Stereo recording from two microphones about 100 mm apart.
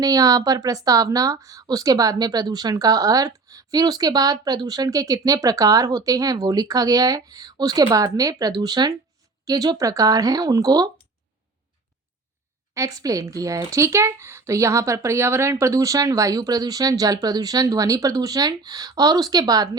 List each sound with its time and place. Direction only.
0.0 s a woman's voice: 35° right (ahead or behind)
12.7 s a woman's voice: 30° right (ahead or behind)